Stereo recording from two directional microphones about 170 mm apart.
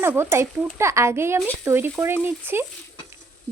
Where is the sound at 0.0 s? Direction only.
15° right (ahead or behind).